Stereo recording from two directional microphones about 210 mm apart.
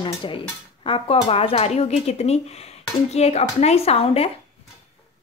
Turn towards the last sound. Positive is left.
turn(degrees=30)  # may be behind; listen again after turning